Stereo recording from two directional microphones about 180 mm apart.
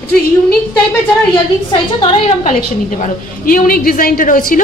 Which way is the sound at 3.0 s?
50° left (ahead or behind).